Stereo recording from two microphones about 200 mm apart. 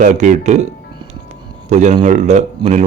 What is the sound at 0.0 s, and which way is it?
Speech, 40° right (ahead or behind).